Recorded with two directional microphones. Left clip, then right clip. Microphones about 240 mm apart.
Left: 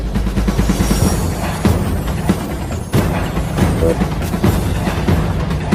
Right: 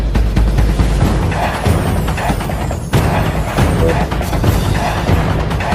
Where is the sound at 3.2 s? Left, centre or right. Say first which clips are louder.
Right 3 dB; centre.